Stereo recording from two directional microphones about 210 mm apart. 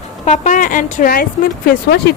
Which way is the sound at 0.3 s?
35° left (ahead or behind).